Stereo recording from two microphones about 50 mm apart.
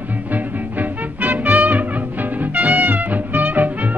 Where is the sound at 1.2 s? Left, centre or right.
Right.